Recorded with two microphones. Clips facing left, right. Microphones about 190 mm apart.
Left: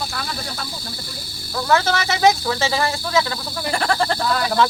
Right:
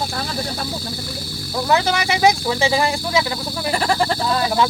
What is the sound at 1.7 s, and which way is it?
Speech, 15° right (ahead or behind).